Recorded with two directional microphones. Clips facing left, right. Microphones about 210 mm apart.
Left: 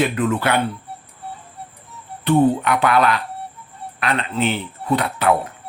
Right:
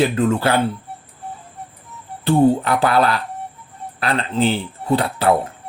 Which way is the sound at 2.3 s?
30° right (ahead or behind).